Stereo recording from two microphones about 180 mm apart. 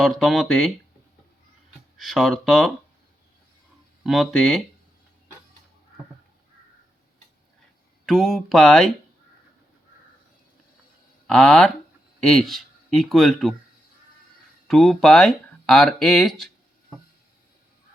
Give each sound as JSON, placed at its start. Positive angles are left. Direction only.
{"t": 0.0, "sound": "speech", "side_deg": 0}
{"t": 2.0, "sound": "speech", "side_deg": 0}
{"t": 4.0, "sound": "speech", "side_deg": 0}
{"t": 8.0, "sound": "speech", "side_deg": 0}
{"t": 11.3, "sound": "speech", "side_deg": 5}
{"t": 14.7, "sound": "speech", "side_deg": 0}